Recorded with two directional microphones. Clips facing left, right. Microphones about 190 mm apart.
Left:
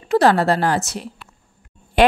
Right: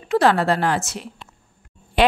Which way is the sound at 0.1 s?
40° left (ahead or behind).